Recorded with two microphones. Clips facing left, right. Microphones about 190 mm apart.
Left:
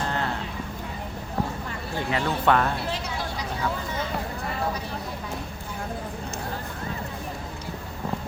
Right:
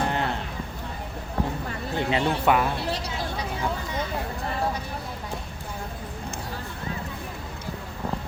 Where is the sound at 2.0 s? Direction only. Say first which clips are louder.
Right 3 dB; 20° right (ahead or behind).